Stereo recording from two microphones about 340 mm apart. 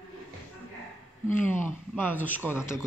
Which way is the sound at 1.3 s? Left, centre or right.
Centre.